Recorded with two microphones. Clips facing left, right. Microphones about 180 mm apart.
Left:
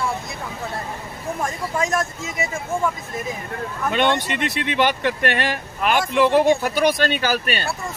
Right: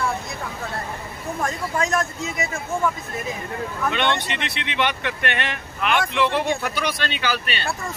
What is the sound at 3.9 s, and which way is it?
Speech, 45° left (ahead or behind).